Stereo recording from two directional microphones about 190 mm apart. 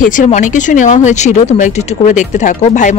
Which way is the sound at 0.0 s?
45° left (ahead or behind).